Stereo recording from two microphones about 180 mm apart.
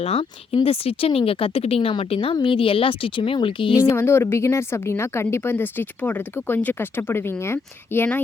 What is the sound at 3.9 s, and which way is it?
Speech, 15° left (ahead or behind).